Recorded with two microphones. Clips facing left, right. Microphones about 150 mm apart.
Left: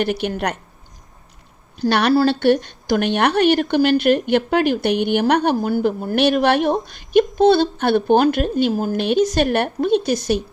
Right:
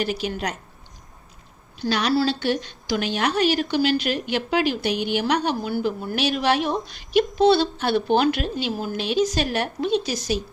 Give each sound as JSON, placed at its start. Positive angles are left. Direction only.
{"t": 0.0, "sound": "a woman's voice", "side_deg": 60}
{"t": 1.9, "sound": "speech", "side_deg": 60}